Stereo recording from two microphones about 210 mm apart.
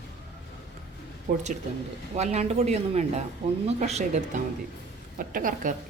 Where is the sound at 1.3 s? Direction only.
35° right (ahead or behind).